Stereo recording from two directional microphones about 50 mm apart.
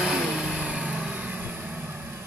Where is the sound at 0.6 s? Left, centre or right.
Centre; by 1.9 s right.